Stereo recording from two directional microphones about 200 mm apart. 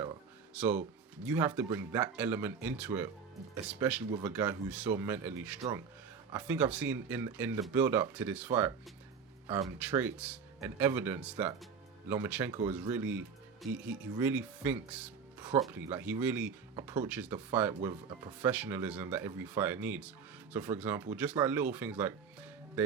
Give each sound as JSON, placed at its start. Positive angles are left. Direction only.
{"t": 0.5, "sound": "speech", "side_deg": -5}